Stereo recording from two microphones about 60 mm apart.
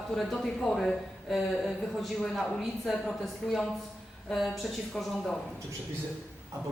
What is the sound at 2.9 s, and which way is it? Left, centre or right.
Speech, centre.